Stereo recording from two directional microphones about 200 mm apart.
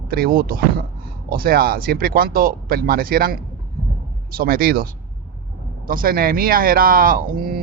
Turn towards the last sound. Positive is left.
turn(degrees=-45)  # may be behind; listen again after turning